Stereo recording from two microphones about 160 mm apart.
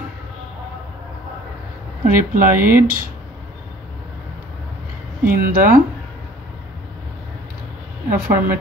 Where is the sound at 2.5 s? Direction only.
15° right (ahead or behind).